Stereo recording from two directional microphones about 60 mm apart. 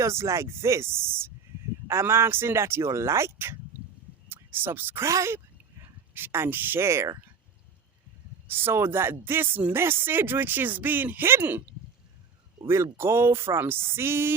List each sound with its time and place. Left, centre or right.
0.0 s speech: right
5.0 s speech: right
6.1 s speech: right
8.4 s speech: right
12.6 s speech: right